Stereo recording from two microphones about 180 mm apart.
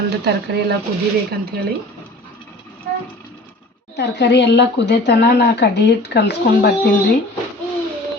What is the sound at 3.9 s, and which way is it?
Speech, 70° left (ahead or behind).